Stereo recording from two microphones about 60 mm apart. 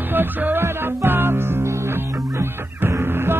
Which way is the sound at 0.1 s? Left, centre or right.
Right.